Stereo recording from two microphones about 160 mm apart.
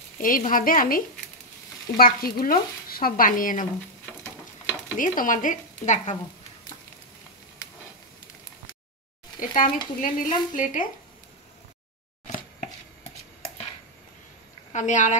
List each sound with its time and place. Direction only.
0.2 s speech: 60° left (ahead or behind)
4.9 s frying: 55° left (ahead or behind)
9.4 s speech: 55° left (ahead or behind)
14.7 s a woman's voice: 50° left (ahead or behind)